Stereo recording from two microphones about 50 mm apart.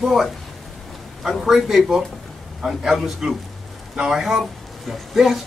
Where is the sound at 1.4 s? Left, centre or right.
Centre.